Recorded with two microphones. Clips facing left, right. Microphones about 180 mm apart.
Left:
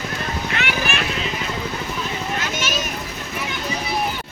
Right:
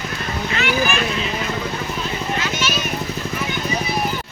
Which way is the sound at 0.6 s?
65° left (ahead or behind).